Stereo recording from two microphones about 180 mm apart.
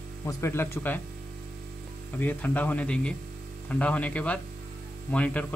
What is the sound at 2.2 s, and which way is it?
Speech, 10° left (ahead or behind).